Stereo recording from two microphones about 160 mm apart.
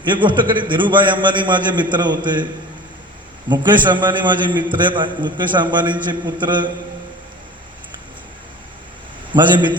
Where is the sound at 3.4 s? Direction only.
30° right (ahead or behind).